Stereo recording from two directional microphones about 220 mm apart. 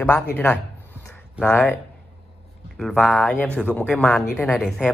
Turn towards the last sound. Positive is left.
turn(degrees=5)  # may be behind; listen again after turning